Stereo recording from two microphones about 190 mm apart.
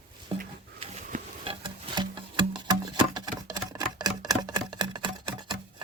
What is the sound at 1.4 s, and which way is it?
Music, 25° right (ahead or behind).